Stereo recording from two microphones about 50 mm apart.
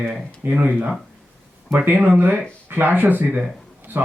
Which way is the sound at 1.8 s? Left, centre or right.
Right.